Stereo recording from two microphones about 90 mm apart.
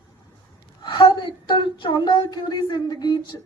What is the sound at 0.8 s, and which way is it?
A woman's voice, 60° left (ahead or behind).